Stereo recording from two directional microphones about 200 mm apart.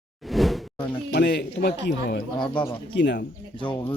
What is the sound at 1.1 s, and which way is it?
A man's voice, 55° left (ahead or behind).